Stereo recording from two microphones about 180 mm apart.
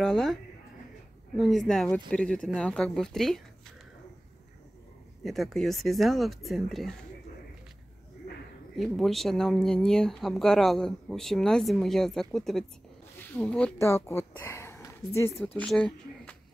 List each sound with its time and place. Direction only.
0.0 s speech: centre (ahead or behind)
5.2 s speech: centre (ahead or behind)
8.7 s speech: centre (ahead or behind)
15.4 s speech: 5° left (ahead or behind)